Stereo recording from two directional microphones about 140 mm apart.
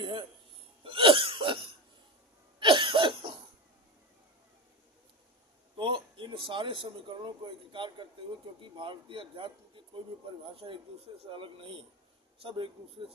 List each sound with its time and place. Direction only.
0.0 s hiccup: 35° right (ahead or behind)
0.9 s cough: 40° right (ahead or behind)
5.7 s speech: 35° right (ahead or behind)